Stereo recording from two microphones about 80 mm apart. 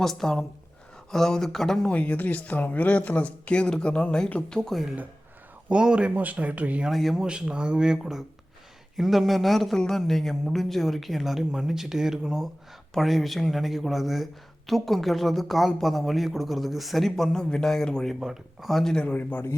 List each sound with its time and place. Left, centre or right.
0.0 s speech: centre
1.9 s speech: centre
5.6 s speech: centre
6.9 s speech: centre
7.3 s speech: centre
18.9 s a man's voice: centre